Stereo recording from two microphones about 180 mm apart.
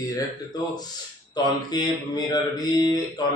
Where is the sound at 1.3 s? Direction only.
20° left (ahead or behind).